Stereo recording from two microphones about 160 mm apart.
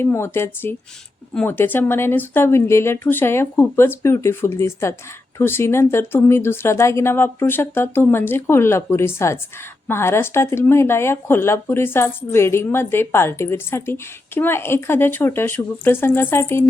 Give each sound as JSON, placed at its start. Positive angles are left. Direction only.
{"t": 0.0, "sound": "speech", "side_deg": 15}